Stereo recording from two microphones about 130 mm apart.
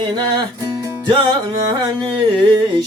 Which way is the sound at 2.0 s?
40° right (ahead or behind).